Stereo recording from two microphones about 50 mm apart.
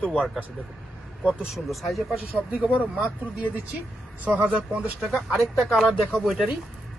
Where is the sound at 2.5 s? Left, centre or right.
Right.